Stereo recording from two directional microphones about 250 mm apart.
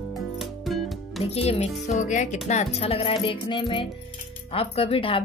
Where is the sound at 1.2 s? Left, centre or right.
Left.